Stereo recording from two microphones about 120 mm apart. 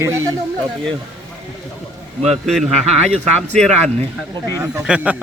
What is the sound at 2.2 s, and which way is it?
Speech, centre (ahead or behind).